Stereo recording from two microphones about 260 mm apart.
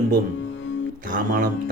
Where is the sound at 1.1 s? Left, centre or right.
Right.